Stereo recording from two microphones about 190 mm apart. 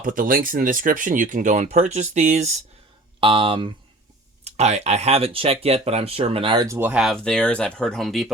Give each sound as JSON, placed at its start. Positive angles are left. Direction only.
{"t": 0.0, "sound": "speech", "side_deg": -45}